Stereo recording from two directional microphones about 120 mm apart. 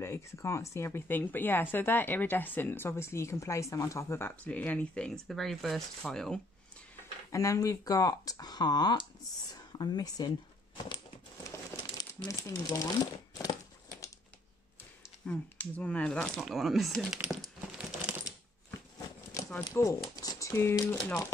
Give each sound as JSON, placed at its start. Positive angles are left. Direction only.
{"t": 0.0, "sound": "speech", "side_deg": 20}
{"t": 4.5, "sound": "speech", "side_deg": 10}
{"t": 7.2, "sound": "speech", "side_deg": 25}
{"t": 11.7, "sound": "speech", "side_deg": 35}
{"t": 15.2, "sound": "speech", "side_deg": 10}
{"t": 17.7, "sound": "coin", "side_deg": -10}
{"t": 18.9, "sound": "a sound", "side_deg": 30}
{"t": 19.7, "sound": "speech", "side_deg": 25}